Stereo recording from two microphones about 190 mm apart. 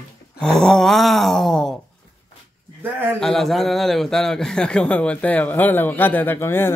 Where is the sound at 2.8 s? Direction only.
10° right (ahead or behind).